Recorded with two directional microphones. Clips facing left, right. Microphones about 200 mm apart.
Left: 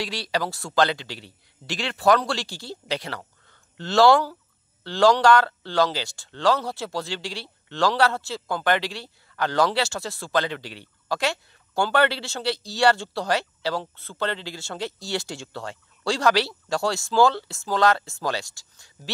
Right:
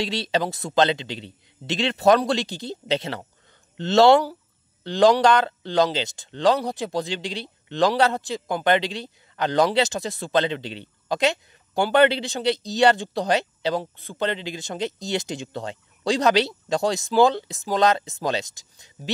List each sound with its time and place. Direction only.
0.0 s speech: 25° right (ahead or behind)